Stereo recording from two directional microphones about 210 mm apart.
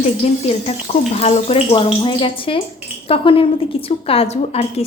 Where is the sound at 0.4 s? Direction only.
30° left (ahead or behind).